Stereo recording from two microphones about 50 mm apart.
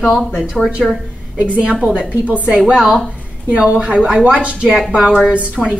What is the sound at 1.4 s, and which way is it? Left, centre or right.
A woman's voice, right.